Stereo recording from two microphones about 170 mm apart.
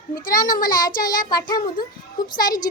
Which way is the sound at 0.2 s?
55° left (ahead or behind).